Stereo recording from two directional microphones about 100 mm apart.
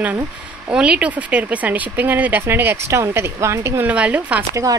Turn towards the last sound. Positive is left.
turn(degrees=-35)  # may be behind; listen again after turning